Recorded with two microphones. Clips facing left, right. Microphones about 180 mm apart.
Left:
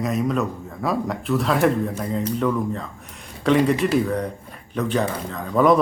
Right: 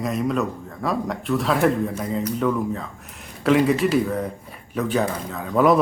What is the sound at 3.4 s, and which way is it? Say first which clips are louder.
Speech: even; 5° right (ahead or behind).